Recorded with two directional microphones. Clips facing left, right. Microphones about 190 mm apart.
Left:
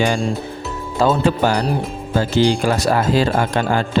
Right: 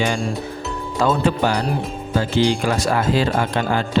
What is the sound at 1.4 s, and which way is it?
Speech, 45° left (ahead or behind).